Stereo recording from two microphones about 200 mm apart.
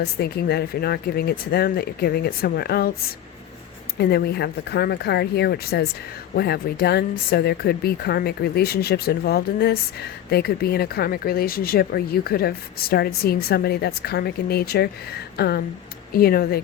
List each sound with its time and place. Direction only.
0.0 s speech: 50° left (ahead or behind)